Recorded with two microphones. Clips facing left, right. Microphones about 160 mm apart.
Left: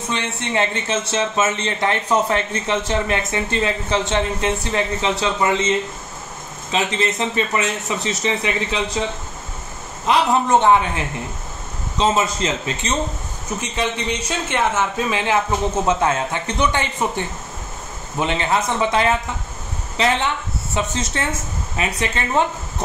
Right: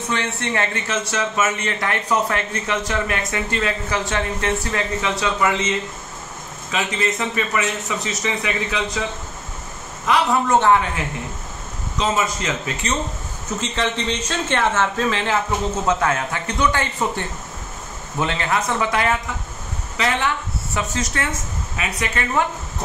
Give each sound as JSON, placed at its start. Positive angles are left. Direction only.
{"t": 0.1, "sound": "speech", "side_deg": 20}
{"t": 6.7, "sound": "speech", "side_deg": 25}
{"t": 10.0, "sound": "speech", "side_deg": 20}
{"t": 12.0, "sound": "speech", "side_deg": 30}
{"t": 13.6, "sound": "a man's voice", "side_deg": 15}
{"t": 18.2, "sound": "speech", "side_deg": 20}